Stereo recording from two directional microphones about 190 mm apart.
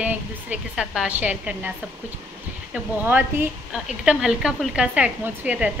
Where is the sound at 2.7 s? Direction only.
10° right (ahead or behind).